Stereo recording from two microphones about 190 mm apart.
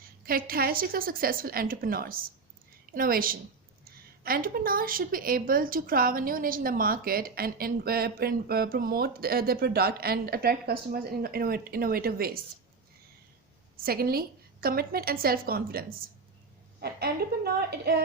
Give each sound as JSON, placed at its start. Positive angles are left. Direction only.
{"t": 0.3, "sound": "a woman's voice", "side_deg": -50}
{"t": 13.8, "sound": "a woman's voice", "side_deg": -50}